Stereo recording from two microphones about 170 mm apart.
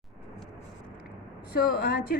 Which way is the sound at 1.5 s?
65° left (ahead or behind).